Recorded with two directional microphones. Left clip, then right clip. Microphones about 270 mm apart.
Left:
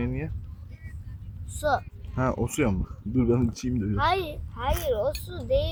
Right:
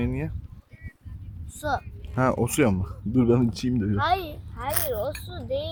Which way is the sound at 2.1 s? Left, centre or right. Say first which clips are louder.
Right 4 dB; right.